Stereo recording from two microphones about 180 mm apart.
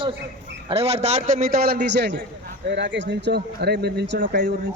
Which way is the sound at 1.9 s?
70° right (ahead or behind).